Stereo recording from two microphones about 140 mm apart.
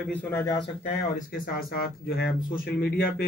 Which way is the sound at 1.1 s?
90° left.